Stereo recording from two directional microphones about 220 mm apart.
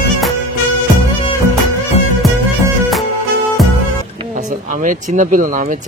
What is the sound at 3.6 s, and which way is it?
Music, centre (ahead or behind).